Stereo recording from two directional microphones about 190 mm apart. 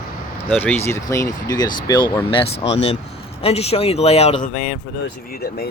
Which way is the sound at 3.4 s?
30° left (ahead or behind).